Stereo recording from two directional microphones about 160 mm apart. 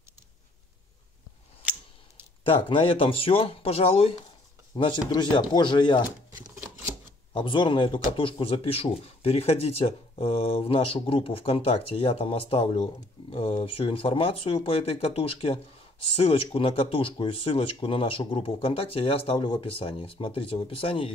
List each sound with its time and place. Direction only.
2.4 s a man's voice: 35° left (ahead or behind)
6.0 s shuffling cards: 15° right (ahead or behind)
7.3 s a man's voice: 30° left (ahead or behind)